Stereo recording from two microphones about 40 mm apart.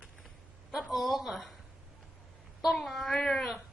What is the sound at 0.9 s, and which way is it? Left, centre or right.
Speech, centre.